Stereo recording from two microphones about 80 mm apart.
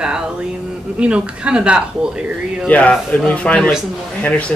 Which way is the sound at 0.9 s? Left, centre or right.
Centre.